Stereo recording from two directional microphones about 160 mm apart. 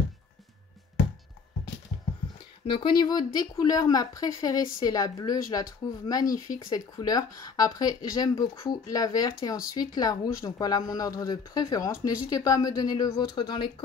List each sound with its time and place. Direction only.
2.6 s speech: 30° left (ahead or behind)